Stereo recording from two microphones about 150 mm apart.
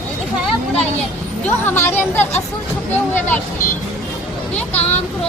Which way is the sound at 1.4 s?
15° left (ahead or behind).